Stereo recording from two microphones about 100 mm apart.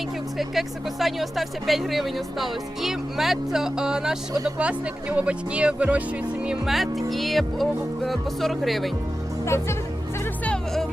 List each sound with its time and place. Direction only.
0.3 s speech: centre (ahead or behind)
9.4 s music: 25° left (ahead or behind)
10.4 s music: 10° left (ahead or behind)